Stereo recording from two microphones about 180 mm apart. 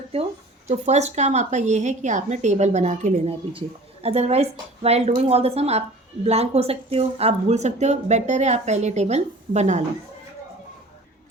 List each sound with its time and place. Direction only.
0.7 s speech: 40° right (ahead or behind)